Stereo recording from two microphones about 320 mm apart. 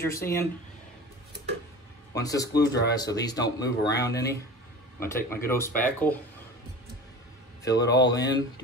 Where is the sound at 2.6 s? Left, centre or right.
Left.